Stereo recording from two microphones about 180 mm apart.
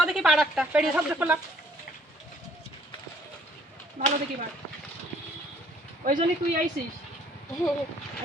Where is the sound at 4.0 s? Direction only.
45° right (ahead or behind).